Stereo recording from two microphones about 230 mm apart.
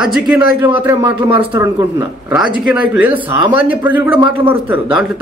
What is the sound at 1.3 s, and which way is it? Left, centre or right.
A man's voice, right.